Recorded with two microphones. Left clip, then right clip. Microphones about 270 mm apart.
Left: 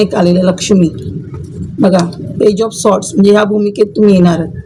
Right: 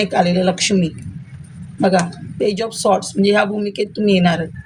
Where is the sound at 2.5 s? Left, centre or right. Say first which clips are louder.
Left 5 dB; right.